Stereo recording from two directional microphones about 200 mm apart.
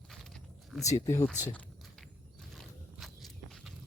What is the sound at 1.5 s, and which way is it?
Walk, 5° left (ahead or behind).